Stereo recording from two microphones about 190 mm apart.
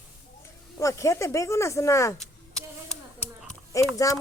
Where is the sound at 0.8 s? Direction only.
15° left (ahead or behind).